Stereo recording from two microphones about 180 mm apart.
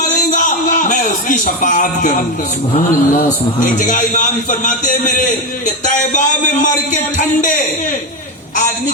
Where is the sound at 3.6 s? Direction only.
45° left (ahead or behind).